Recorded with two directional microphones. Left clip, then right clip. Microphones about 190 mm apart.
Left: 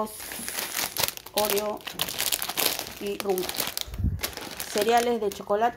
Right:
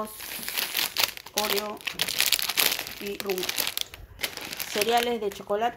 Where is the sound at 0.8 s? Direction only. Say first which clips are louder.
Right 1 dB; centre (ahead or behind).